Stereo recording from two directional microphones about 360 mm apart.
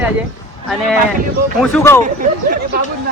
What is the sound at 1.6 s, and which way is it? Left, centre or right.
Speech, centre.